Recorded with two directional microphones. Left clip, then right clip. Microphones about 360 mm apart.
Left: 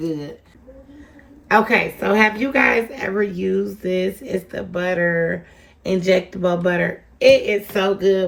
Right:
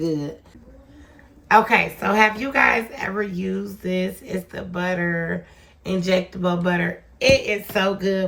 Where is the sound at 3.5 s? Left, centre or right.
Centre.